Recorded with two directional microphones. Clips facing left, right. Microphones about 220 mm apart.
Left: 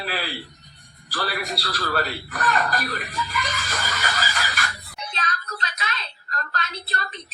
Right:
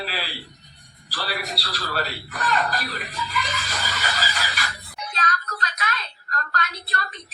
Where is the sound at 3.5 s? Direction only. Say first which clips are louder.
Left 1 dB; 50° left (ahead or behind).